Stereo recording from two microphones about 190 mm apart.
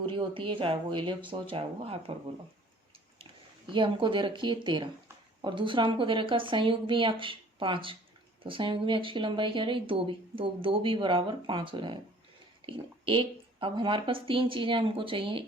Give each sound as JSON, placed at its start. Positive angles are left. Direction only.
{"t": 0.0, "sound": "speech", "side_deg": -25}
{"t": 3.7, "sound": "speech", "side_deg": -25}